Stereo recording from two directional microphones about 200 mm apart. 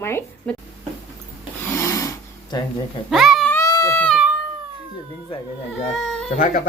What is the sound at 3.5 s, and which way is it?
Baby cry, 15° left (ahead or behind).